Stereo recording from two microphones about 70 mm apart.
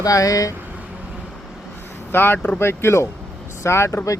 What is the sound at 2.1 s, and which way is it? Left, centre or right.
Speech, left.